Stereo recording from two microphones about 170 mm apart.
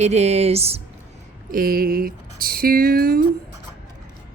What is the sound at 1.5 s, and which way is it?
Speech, 60° right (ahead or behind).